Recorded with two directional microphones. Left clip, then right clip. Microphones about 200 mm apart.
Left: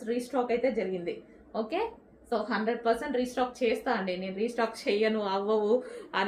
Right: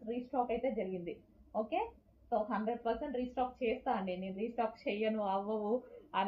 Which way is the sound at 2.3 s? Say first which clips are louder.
Left 5 dB; 25° left (ahead or behind).